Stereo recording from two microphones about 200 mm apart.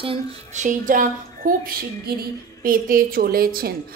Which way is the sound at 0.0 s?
30° right (ahead or behind).